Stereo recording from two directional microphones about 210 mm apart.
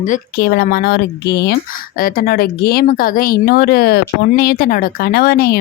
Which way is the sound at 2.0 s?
40° left (ahead or behind).